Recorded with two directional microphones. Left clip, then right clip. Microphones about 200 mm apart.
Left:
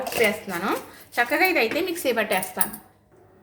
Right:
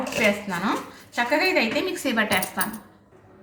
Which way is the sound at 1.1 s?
20° left (ahead or behind).